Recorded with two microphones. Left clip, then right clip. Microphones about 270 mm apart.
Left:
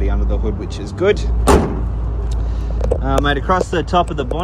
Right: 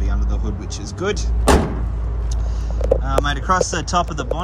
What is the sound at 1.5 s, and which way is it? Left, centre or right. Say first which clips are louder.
Vehicle: left 3 dB; centre.